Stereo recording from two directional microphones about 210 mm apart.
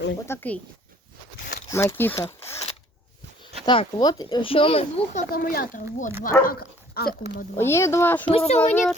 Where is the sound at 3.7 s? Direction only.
25° left (ahead or behind).